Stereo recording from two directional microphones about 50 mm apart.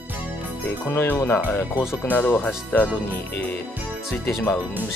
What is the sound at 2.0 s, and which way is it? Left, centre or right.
Speech, left.